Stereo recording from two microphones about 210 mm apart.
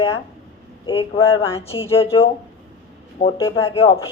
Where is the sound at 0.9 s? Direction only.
25° left (ahead or behind).